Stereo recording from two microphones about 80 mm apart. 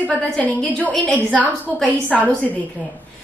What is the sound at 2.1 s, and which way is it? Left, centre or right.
Speech, centre.